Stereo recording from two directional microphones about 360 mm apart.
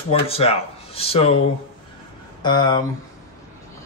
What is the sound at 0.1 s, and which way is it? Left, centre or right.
Speech, centre.